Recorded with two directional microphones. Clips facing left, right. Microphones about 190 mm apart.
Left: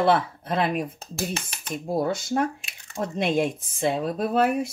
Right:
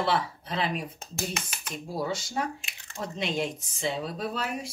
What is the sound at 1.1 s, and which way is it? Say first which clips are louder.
Speech: left 4 dB; 30° left (ahead or behind).